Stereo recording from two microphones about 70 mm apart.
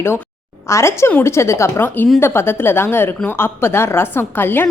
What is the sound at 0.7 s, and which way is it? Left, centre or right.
A woman's voice, left.